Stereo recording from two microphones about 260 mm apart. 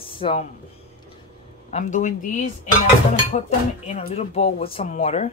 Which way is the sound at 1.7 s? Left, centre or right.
Left.